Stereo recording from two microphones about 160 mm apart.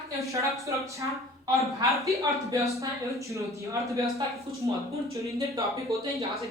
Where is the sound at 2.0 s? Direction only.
20° right (ahead or behind).